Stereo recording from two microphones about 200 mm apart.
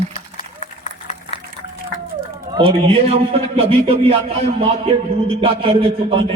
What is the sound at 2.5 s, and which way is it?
A man's voice, 30° right (ahead or behind).